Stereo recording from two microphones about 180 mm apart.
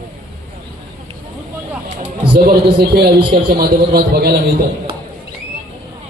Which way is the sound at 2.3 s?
60° right (ahead or behind).